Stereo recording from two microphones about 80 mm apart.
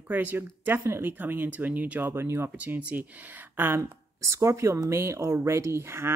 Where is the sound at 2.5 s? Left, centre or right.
Centre.